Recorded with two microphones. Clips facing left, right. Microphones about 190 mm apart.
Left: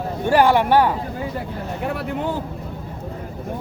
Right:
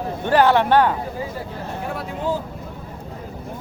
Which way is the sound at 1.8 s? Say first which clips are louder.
Left 5 dB; 60° left (ahead or behind).